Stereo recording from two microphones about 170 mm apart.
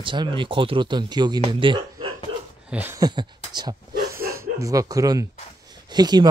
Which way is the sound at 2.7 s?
10° right (ahead or behind).